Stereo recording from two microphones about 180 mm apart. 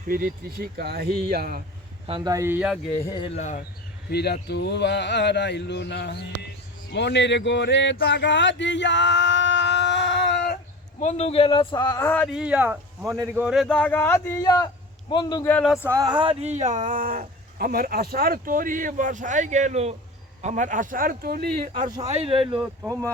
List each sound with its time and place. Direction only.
0.1 s speech: 55° right (ahead or behind)
2.0 s speech: 25° right (ahead or behind); by 2.9 s 5° right (ahead or behind)
3.0 s speech: 25° left (ahead or behind)
4.1 s speech: 65° left (ahead or behind)
11.0 s a man's voice: 35° left (ahead or behind); by 12.3 s 10° left (ahead or behind)
12.3 s a man's voice: 5° right (ahead or behind); by 15.4 s 25° left (ahead or behind)
15.4 s speech: 5° left (ahead or behind)
15.9 s speech: 20° right (ahead or behind); by 17.7 s 45° right (ahead or behind)
17.7 s speech: 60° right (ahead or behind)
22.0 s speech: 35° right (ahead or behind)
22.6 s speech: 15° right (ahead or behind)